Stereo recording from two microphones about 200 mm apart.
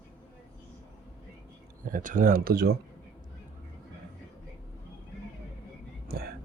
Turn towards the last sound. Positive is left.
turn(degrees=-50)  # may be behind; listen again after turning